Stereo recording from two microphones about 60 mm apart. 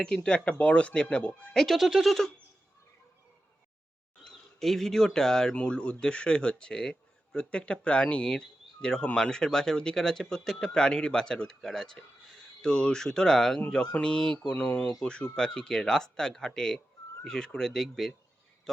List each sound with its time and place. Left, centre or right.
0.0 s speech: centre
1.5 s speech: centre
4.3 s speech: centre
14.5 s speech: left; by 18.1 s centre